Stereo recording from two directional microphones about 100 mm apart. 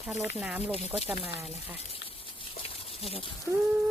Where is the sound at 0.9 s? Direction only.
15° right (ahead or behind).